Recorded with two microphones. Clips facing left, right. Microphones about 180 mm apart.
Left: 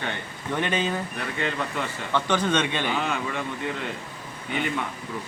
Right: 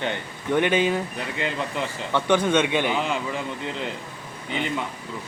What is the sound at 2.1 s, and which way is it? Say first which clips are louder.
Speech: right 3 dB; 10° right (ahead or behind).